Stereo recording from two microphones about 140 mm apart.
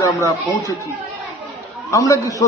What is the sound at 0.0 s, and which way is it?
Speech, 20° left (ahead or behind).